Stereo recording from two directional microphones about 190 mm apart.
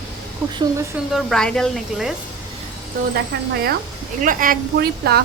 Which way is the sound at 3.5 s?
55° right (ahead or behind).